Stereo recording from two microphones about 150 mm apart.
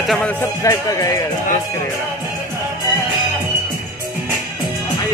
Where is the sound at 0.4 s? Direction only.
20° left (ahead or behind).